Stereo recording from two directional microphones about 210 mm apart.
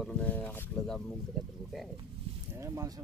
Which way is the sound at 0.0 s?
5° left (ahead or behind).